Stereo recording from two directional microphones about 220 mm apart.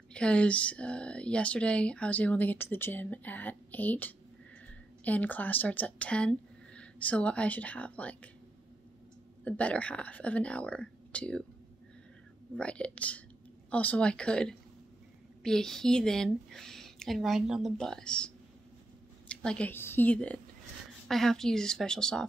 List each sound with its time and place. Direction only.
0.1 s speech: 5° left (ahead or behind)
9.4 s a woman's voice: 5° left (ahead or behind)
12.5 s a woman's voice: 5° left (ahead or behind)